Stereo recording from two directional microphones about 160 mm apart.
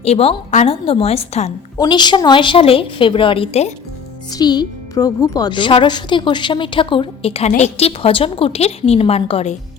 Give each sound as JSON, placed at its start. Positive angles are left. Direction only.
{"t": 0.0, "sound": "speech", "side_deg": 40}
{"t": 1.8, "sound": "speech", "side_deg": 25}
{"t": 4.3, "sound": "speech", "side_deg": 25}